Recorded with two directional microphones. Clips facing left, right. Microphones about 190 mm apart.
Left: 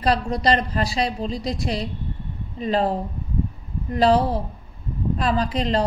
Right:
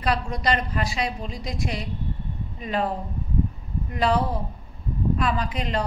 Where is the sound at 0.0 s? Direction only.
35° left (ahead or behind).